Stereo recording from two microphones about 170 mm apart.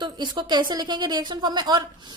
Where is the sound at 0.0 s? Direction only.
25° right (ahead or behind).